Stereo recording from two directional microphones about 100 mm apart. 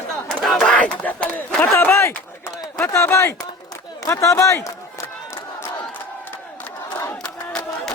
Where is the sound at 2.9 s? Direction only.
30° left (ahead or behind).